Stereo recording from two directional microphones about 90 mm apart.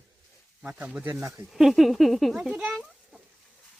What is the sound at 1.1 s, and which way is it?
Speech, 30° right (ahead or behind).